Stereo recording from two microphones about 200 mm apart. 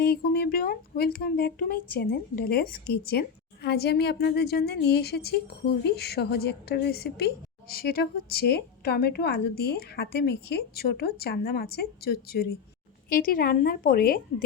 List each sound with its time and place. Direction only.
0.0 s a woman's voice: 50° left (ahead or behind)